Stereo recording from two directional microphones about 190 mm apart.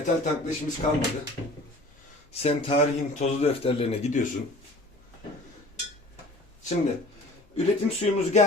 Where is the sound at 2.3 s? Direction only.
30° left (ahead or behind).